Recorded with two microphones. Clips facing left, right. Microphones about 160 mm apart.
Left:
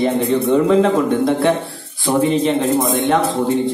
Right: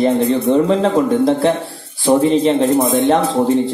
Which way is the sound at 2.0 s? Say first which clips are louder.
Right 3 dB; 35° right (ahead or behind).